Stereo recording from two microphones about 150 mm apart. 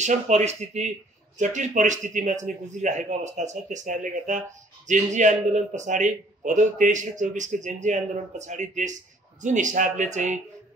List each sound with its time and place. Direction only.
0.0 s a man's voice: 50° right (ahead or behind)